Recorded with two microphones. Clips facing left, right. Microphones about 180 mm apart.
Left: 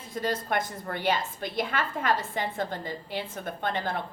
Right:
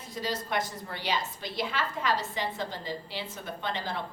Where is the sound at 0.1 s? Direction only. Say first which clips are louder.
Left 3 dB; 55° left (ahead or behind).